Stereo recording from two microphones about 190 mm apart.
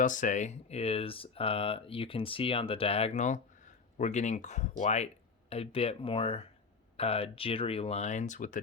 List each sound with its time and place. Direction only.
0.0 s speech: 45° left (ahead or behind)